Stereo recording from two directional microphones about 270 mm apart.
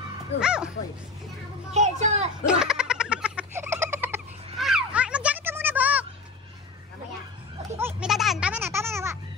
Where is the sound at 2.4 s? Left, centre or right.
Centre.